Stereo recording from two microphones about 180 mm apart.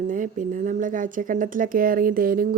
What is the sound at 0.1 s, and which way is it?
Speech, 45° right (ahead or behind).